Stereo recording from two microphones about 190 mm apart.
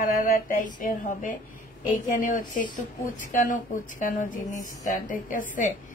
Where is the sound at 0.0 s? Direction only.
45° left (ahead or behind).